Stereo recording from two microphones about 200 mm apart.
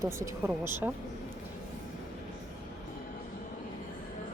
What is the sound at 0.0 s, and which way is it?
Speech, 15° right (ahead or behind).